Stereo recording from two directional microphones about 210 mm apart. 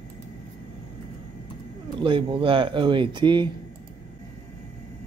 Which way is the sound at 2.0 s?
25° right (ahead or behind).